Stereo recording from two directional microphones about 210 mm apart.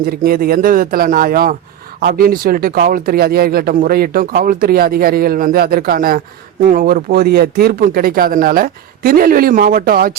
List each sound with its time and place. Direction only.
0.0 s speech: 45° right (ahead or behind)